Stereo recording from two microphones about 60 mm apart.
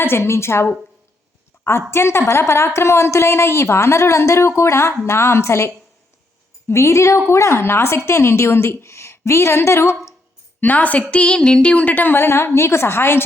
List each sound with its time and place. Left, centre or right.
0.0 s a woman's voice: left
10.6 s a sound: left
12.5 s a woman's voice: left